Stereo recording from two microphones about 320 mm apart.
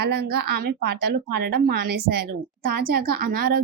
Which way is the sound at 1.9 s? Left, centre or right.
Right.